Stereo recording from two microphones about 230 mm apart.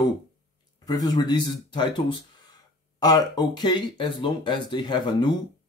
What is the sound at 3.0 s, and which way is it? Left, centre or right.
Speech, centre.